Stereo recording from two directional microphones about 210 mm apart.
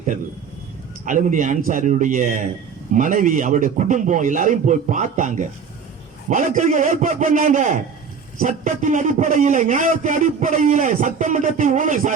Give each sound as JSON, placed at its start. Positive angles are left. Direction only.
{"t": 1.0, "sound": "a man's voice", "side_deg": -35}